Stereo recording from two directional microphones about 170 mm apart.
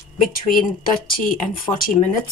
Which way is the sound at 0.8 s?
55° left (ahead or behind).